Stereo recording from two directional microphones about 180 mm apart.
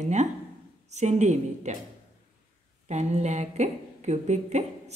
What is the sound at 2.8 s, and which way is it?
A woman's voice, 40° right (ahead or behind).